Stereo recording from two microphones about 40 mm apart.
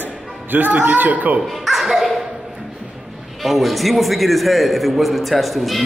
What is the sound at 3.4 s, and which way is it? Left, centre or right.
A man's voice, centre.